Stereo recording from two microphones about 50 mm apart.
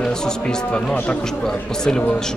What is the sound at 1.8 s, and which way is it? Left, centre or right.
Speech, centre.